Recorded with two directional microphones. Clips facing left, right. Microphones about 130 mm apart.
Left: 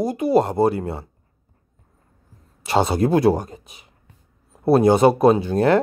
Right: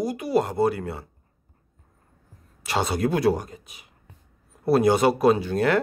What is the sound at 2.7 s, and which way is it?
Speech, 25° left (ahead or behind).